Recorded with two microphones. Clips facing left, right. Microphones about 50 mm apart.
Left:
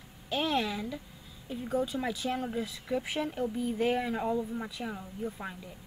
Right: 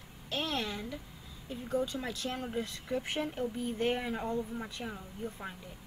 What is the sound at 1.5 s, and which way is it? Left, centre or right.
Speech, centre.